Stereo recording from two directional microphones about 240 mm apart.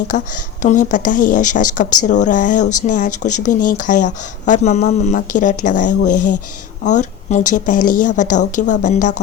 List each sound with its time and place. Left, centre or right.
0.1 s a woman's voice: left